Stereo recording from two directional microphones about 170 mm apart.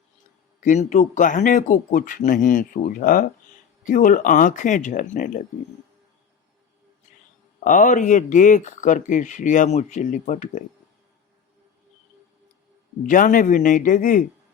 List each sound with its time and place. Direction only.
0.6 s speech: 45° left (ahead or behind)
7.6 s speech: 50° left (ahead or behind)
13.0 s speech: 55° left (ahead or behind)